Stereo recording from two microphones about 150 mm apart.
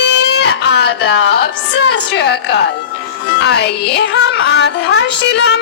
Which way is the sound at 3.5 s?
90° left.